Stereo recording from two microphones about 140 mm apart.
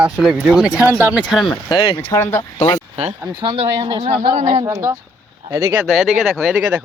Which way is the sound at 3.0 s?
40° right (ahead or behind).